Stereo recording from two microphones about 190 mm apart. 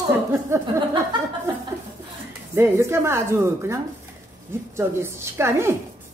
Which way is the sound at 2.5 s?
15° right (ahead or behind).